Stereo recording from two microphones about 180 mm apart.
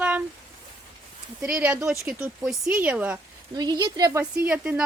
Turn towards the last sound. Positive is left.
turn(degrees=-5)  # may be behind; listen again after turning